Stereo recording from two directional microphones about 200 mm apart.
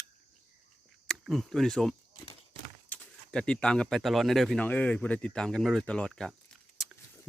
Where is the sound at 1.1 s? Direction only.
5° right (ahead or behind).